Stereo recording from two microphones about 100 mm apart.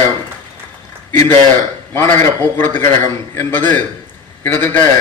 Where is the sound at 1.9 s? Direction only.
20° left (ahead or behind).